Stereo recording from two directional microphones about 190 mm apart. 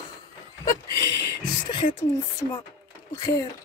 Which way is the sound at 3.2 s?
15° left (ahead or behind).